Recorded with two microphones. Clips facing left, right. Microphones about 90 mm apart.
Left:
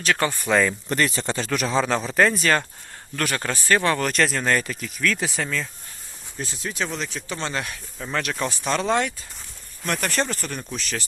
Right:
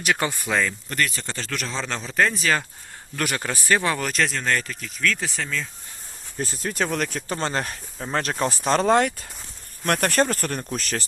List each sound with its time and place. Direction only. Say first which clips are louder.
0.0 s speech: left 1 dB; 15° right (ahead or behind)
0.4 s speech: left 4 dB; centre (ahead or behind)
0.9 s speech: left 4 dB; 25° left (ahead or behind); by 2.6 s centre (ahead or behind)
3.2 s speech: left 1 dB; 15° right (ahead or behind); by 5.6 s 5° left (ahead or behind)
6.4 s speech: right 3 dB; 45° right (ahead or behind)